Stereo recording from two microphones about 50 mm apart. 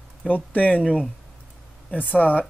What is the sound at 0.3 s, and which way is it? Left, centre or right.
Speech, left.